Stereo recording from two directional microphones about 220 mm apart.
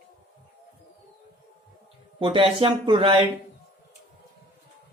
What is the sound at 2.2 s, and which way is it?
Speech, 25° right (ahead or behind).